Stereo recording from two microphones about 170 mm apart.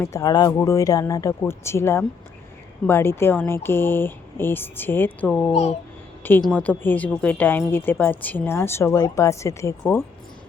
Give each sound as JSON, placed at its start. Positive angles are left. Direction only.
{"t": 0.0, "sound": "a woman's voice", "side_deg": 20}